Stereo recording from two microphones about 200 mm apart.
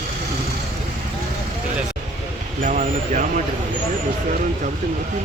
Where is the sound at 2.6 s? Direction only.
40° right (ahead or behind).